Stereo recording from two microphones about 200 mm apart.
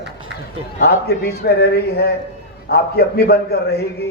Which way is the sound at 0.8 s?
50° left (ahead or behind).